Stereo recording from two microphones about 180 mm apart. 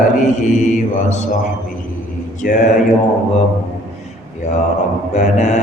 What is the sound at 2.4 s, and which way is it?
Speech, 50° left (ahead or behind).